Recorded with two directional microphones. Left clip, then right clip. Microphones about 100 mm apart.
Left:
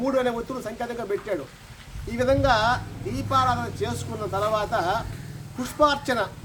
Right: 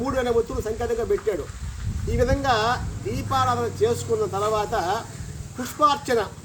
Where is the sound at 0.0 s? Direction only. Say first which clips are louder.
Even; 20° left (ahead or behind).